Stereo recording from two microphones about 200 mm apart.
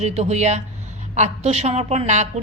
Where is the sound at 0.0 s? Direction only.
35° right (ahead or behind).